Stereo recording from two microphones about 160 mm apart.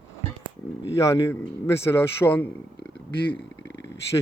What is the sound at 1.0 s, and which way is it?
A man's voice, 20° left (ahead or behind).